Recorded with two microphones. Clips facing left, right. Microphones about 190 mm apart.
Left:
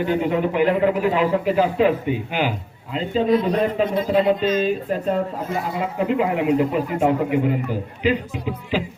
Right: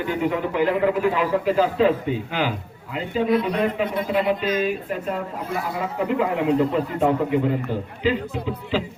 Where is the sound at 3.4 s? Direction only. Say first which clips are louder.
Left 3 dB; 35° left (ahead or behind).